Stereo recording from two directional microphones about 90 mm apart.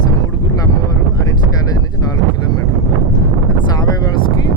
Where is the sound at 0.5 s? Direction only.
40° left (ahead or behind).